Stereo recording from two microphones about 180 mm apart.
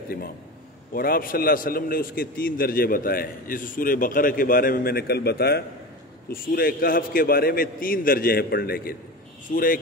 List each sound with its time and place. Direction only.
0.9 s a man's voice: 55° left (ahead or behind)